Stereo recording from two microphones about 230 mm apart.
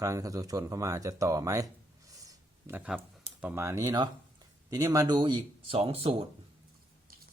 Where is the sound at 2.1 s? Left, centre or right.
Centre.